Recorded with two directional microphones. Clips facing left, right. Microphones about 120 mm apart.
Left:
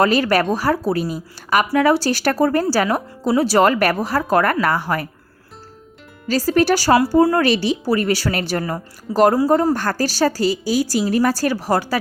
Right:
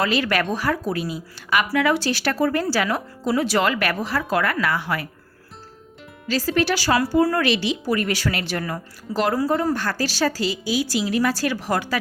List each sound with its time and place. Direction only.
0.0 s a woman's voice: 40° left (ahead or behind)
6.2 s speech: 40° left (ahead or behind)
7.1 s speech: 30° left (ahead or behind)